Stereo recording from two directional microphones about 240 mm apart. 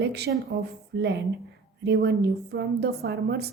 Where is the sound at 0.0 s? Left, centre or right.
Right.